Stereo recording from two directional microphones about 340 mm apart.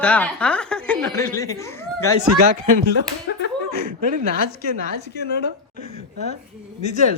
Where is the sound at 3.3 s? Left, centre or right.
Left.